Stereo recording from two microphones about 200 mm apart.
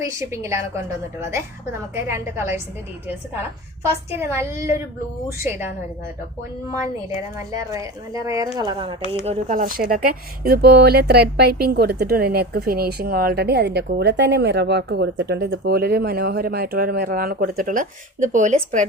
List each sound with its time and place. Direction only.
0.0 s speech: 15° right (ahead or behind)
2.0 s speech: 10° right (ahead or behind)
4.1 s speech: 10° right (ahead or behind)
7.3 s speech: 15° right (ahead or behind)
9.2 s speech: 35° right (ahead or behind)